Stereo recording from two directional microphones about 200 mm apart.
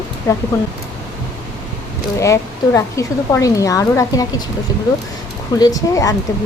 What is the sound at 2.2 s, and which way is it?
A woman's voice, 15° left (ahead or behind).